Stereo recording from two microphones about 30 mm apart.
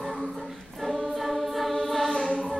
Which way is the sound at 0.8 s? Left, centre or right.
Centre.